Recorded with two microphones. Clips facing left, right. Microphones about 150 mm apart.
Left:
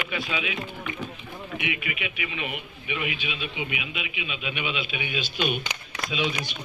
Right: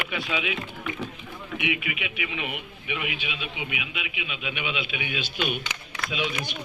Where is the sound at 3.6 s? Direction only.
85° right.